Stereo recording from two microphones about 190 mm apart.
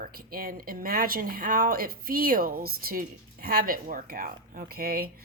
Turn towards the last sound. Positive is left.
turn(degrees=-50)  # may be behind; listen again after turning